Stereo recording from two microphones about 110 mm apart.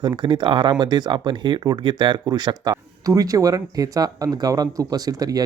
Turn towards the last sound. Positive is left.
turn(degrees=-35)  # may be behind; listen again after turning